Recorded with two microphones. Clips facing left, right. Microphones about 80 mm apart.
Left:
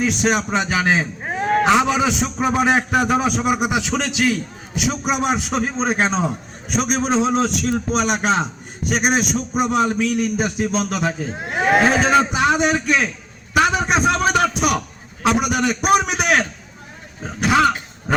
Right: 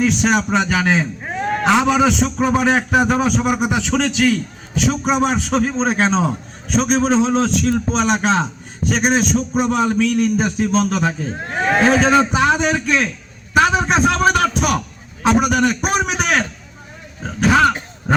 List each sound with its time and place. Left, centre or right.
0.0 s a man's voice: centre
1.4 s a sound: centre
1.6 s a man's voice: centre
13.6 s a sound: centre
15.4 s a man's voice: centre
17.4 s a man's voice: centre